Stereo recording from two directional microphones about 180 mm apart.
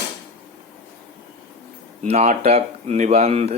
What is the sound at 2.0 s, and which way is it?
Speech, 40° right (ahead or behind).